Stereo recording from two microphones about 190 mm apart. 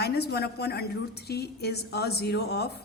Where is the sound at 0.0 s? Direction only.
60° left (ahead or behind).